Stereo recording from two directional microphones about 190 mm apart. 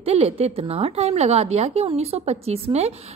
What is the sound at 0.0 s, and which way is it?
A woman's voice, 30° right (ahead or behind).